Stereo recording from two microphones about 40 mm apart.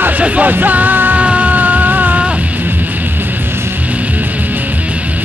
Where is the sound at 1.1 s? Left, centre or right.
Right.